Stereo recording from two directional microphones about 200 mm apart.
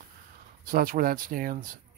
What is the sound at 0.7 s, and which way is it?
Speech, 45° right (ahead or behind).